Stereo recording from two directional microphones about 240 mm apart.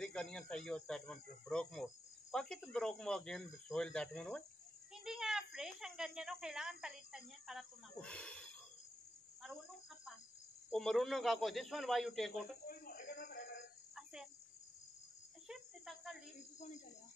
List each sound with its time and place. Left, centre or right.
0.0 s speech: centre
9.4 s cricket: centre
10.7 s speech: centre
12.6 s a sound: left
13.9 s cricket: centre
15.4 s cricket: centre